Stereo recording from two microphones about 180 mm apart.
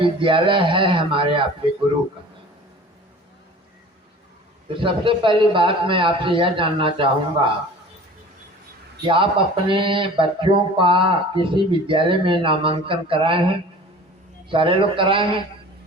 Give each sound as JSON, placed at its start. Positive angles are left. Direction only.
{"t": 0.0, "sound": "speech", "side_deg": -30}
{"t": 4.8, "sound": "speech", "side_deg": -30}
{"t": 9.0, "sound": "speech", "side_deg": -30}
{"t": 14.5, "sound": "speech", "side_deg": -30}